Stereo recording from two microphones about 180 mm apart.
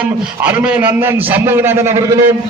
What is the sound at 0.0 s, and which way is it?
A man's voice, 5° right (ahead or behind).